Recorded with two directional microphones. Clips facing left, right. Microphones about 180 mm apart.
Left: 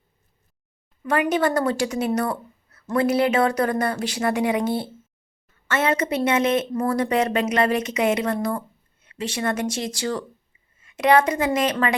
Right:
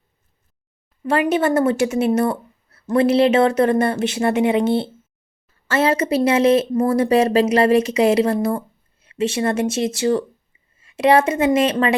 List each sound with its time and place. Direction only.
1.0 s a woman's voice: 25° right (ahead or behind)